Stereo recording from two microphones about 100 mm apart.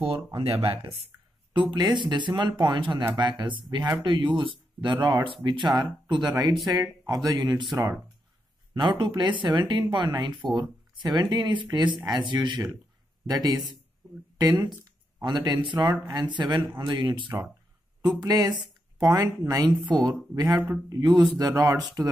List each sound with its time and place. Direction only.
0.4 s speech: 75° right (ahead or behind)
1.5 s speech: 50° right (ahead or behind)
6.7 s speech: 40° right (ahead or behind)
20.5 s speech: 20° right (ahead or behind)
20.9 s speech: 40° right (ahead or behind)